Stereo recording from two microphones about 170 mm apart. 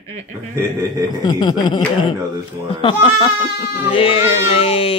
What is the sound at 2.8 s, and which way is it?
Speech, 30° left (ahead or behind).